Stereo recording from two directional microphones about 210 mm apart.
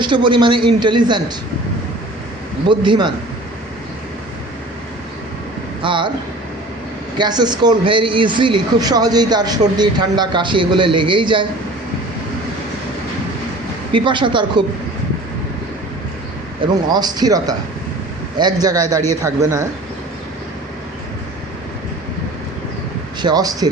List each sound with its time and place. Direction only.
0.0 s speech: 20° right (ahead or behind)
2.6 s speech: 20° right (ahead or behind)
5.8 s speech: 25° right (ahead or behind)
7.2 s speech: 20° right (ahead or behind)
13.9 s speech: 25° right (ahead or behind)
16.9 s a man's voice: 20° right (ahead or behind)
23.2 s a man's voice: 20° right (ahead or behind)